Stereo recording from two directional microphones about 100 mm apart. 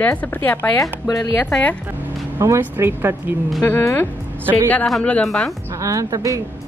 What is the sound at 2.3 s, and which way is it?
Speech, 30° right (ahead or behind).